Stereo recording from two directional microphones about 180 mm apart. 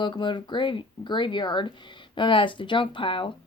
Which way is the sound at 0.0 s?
25° left (ahead or behind).